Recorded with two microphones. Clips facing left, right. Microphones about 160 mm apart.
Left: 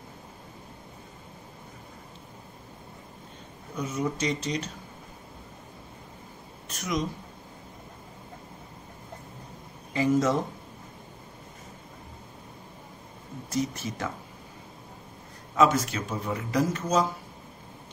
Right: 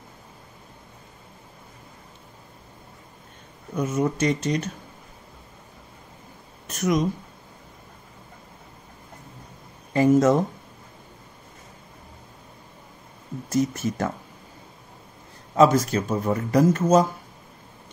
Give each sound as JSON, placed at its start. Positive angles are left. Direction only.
{"t": 3.7, "sound": "a man's voice", "side_deg": -50}
{"t": 6.7, "sound": "speech", "side_deg": -50}
{"t": 9.9, "sound": "a man's voice", "side_deg": -50}
{"t": 13.5, "sound": "a man's voice", "side_deg": -45}
{"t": 15.5, "sound": "a man's voice", "side_deg": -35}